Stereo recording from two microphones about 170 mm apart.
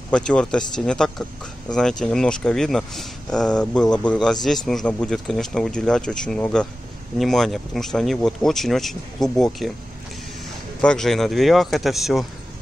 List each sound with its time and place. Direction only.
0.1 s speech: 5° left (ahead or behind)
10.8 s speech: 5° left (ahead or behind)